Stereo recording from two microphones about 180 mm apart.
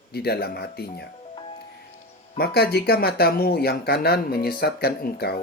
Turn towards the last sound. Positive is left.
turn(degrees=60)  # may be behind; listen again after turning